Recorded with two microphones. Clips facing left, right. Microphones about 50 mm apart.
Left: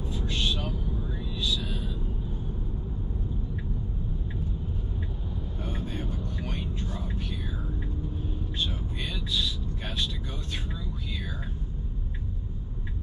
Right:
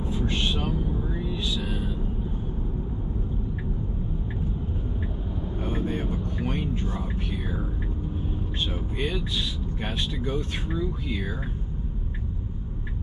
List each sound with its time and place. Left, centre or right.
0.0 s a sound: right
5.6 s vehicle: right
6.0 s whispering: right
8.5 s vehicle: right